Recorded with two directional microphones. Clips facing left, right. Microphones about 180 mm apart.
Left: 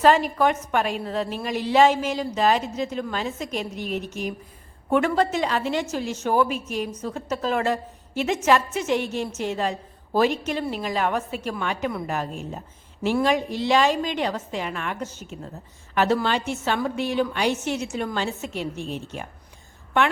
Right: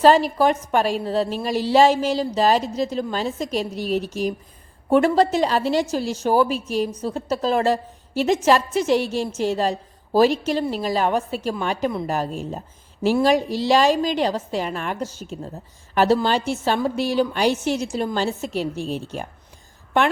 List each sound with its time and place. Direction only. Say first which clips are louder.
0.0 s a woman's voice: right 3 dB; 35° right (ahead or behind)